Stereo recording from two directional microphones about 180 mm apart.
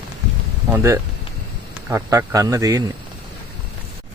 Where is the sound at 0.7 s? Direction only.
15° right (ahead or behind).